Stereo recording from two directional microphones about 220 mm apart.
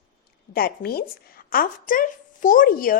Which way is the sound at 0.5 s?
40° left (ahead or behind).